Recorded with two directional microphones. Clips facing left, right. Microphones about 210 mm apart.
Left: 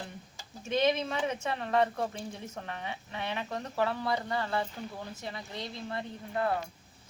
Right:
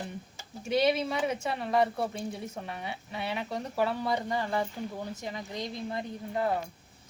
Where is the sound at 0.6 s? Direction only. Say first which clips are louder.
Right 2 dB; 10° right (ahead or behind).